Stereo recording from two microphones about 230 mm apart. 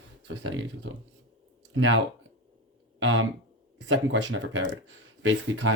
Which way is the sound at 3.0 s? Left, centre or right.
Right.